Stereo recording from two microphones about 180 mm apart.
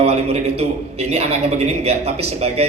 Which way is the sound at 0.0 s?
35° right (ahead or behind).